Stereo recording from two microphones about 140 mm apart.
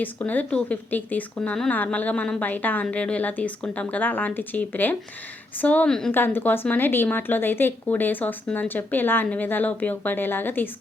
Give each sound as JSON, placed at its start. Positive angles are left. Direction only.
{"t": 0.0, "sound": "speech", "side_deg": 10}